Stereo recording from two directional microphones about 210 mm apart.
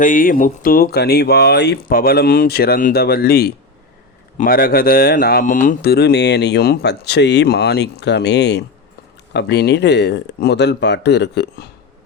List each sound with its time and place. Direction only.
0.0 s speech: 40° left (ahead or behind)